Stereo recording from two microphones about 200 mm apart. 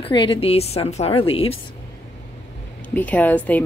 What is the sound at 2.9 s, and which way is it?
Speech, 10° left (ahead or behind).